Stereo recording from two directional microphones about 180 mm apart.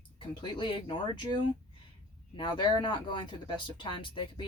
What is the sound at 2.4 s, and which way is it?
Speech, 25° left (ahead or behind).